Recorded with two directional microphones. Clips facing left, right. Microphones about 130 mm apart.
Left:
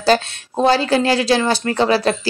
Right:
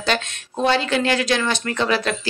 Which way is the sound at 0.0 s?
35° left (ahead or behind).